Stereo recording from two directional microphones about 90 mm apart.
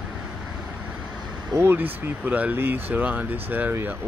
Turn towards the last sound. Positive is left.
turn(degrees=-20)  # may be behind; listen again after turning